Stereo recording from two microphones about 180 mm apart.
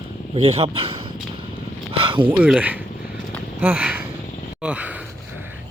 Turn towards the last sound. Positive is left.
turn(degrees=-5)  # may be behind; listen again after turning